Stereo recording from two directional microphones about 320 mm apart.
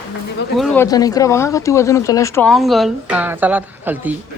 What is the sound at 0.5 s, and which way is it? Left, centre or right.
Speech, centre.